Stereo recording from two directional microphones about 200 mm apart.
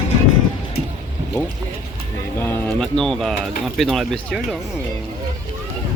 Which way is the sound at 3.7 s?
Centre (ahead or behind).